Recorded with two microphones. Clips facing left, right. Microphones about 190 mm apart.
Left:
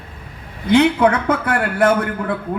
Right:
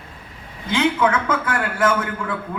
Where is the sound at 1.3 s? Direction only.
60° left (ahead or behind).